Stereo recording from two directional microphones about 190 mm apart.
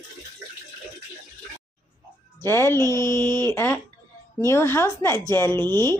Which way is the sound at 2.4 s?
15° left (ahead or behind).